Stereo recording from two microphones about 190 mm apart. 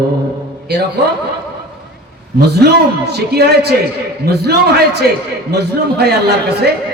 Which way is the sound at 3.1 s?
60° right (ahead or behind).